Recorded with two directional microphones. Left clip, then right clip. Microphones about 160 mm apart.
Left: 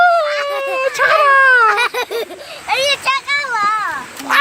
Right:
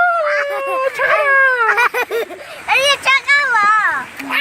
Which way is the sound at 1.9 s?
Centre (ahead or behind).